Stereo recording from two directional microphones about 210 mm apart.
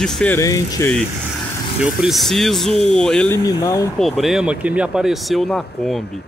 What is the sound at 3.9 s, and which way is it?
Speech, centre (ahead or behind).